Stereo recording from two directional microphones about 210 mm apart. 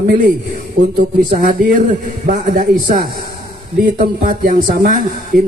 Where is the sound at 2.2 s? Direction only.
40° right (ahead or behind).